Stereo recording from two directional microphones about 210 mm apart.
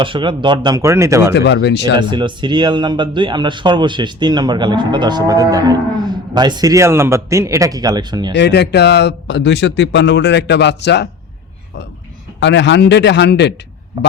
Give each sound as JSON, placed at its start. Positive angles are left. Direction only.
{"t": 0.0, "sound": "speech", "side_deg": -25}
{"t": 1.3, "sound": "speech", "side_deg": 55}
{"t": 2.0, "sound": "a man's voice", "side_deg": -20}
{"t": 8.3, "sound": "speech", "side_deg": 55}
{"t": 12.4, "sound": "speech", "side_deg": 55}